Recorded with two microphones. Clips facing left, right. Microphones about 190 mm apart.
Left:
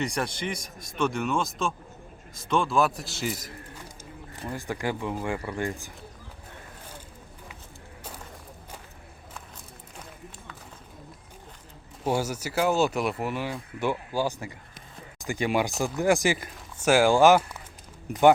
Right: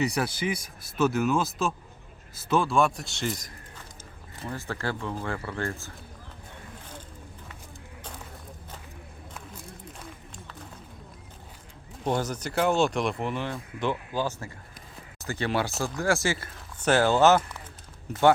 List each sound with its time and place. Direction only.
0.0 s speech: 5° right (ahead or behind); by 5.9 s 15° left (ahead or behind)
12.0 s speech: 10° left (ahead or behind)